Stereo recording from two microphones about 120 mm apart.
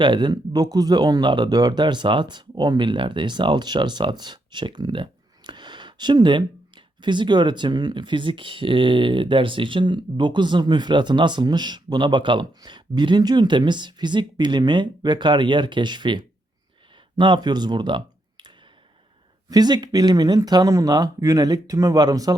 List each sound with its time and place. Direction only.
0.0 s speech: 40° right (ahead or behind)